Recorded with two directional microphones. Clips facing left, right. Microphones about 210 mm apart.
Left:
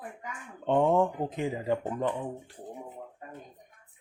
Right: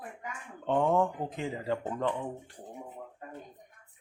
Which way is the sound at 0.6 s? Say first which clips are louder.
Left 3 dB; 20° left (ahead or behind).